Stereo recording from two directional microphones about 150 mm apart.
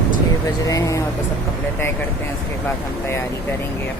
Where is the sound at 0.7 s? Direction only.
20° left (ahead or behind).